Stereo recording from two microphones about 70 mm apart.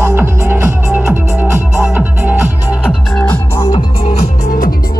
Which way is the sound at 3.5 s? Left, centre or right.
Left.